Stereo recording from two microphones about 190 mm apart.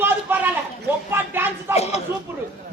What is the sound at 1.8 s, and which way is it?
Speech, 35° left (ahead or behind).